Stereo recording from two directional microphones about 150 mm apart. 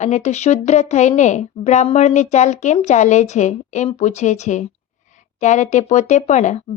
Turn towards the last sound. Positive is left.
turn(degrees=50)  # may be behind; listen again after turning